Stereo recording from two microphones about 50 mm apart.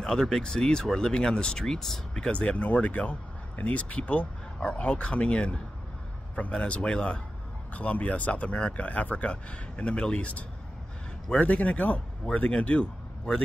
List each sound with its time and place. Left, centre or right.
0.0 s speech: centre; by 13.3 s left